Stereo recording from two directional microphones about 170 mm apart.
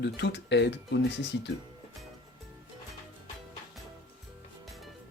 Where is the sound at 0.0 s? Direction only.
90° left.